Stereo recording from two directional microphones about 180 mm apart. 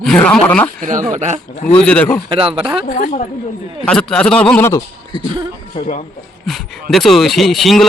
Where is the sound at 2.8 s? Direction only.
50° left (ahead or behind).